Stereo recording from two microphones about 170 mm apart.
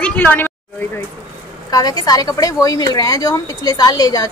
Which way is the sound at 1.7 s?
25° left (ahead or behind).